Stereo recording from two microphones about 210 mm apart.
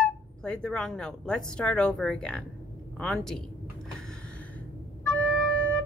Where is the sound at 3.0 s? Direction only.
Centre (ahead or behind).